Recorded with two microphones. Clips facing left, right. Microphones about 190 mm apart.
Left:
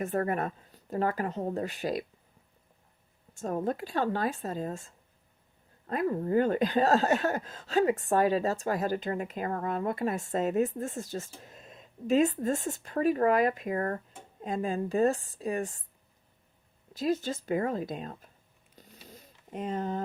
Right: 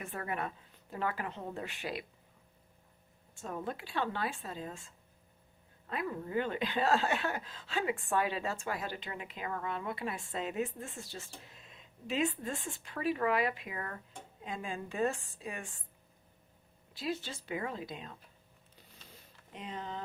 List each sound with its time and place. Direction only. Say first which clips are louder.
0.0 s speech: left 9 dB; 45° left (ahead or behind)
3.3 s speech: left 8 dB; 45° left (ahead or behind)
16.9 s speech: left 9 dB; 45° left (ahead or behind)
19.0 s a sound: left 8 dB; 45° left (ahead or behind)